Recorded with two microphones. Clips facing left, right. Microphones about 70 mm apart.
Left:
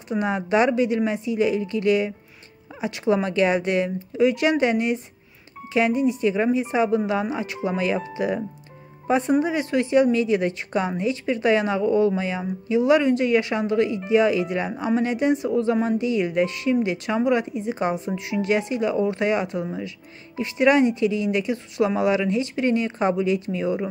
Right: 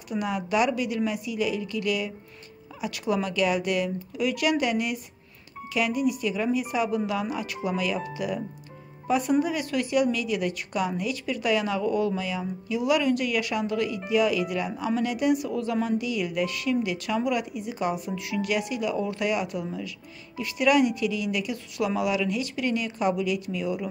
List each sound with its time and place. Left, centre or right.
0.1 s a woman's voice: left